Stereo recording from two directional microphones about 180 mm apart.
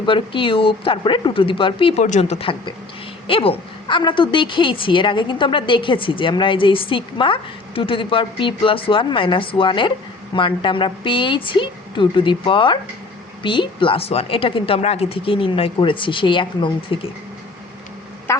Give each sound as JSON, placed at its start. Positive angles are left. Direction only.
{"t": 0.0, "sound": "a woman's voice", "side_deg": 30}
{"t": 18.3, "sound": "quack", "side_deg": 15}